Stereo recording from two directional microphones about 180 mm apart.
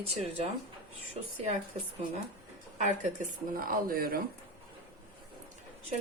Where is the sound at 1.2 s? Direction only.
35° right (ahead or behind).